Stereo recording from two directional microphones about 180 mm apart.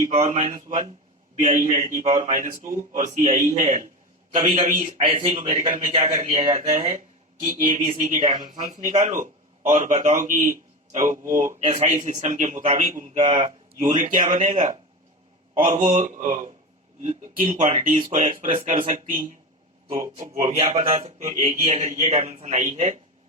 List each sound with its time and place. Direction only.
0.0 s a man's voice: 40° right (ahead or behind)
6.3 s speech: 25° right (ahead or behind)
6.6 s a man's voice: 35° right (ahead or behind)
8.1 s speech: 25° right (ahead or behind)
9.0 s a man's voice: 45° right (ahead or behind)
13.8 s a man's voice: 45° right (ahead or behind)
18.2 s speech: 30° right (ahead or behind)
18.8 s a man's voice: 45° right (ahead or behind)
19.9 s a man's voice: 35° right (ahead or behind)